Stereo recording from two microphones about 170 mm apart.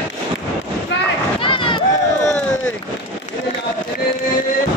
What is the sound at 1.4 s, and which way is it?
Run, 30° left (ahead or behind).